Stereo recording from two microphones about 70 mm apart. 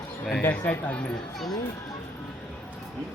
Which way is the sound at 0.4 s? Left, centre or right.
Centre.